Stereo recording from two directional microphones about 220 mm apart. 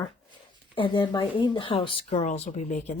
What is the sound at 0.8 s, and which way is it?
Speech, 20° left (ahead or behind).